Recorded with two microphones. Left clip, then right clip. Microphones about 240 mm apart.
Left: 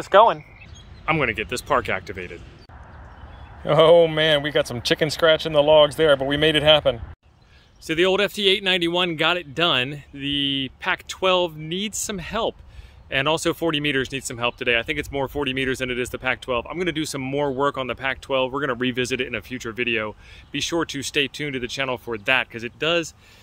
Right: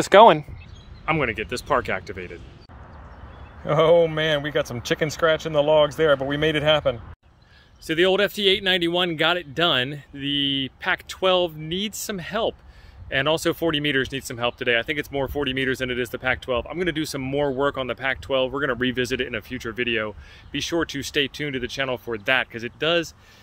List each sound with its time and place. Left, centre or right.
0.0 s speech: right
1.0 s speech: centre
3.6 s speech: centre